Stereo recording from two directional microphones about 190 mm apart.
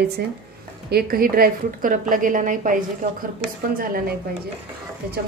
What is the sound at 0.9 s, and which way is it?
A woman's voice, 50° right (ahead or behind).